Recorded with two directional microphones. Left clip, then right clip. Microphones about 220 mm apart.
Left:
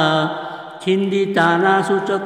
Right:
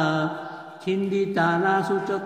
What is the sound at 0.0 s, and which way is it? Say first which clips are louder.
Mantra: left 7 dB; 30° left (ahead or behind).